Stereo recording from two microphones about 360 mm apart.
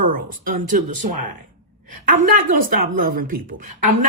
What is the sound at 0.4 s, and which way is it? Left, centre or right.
Speech, right.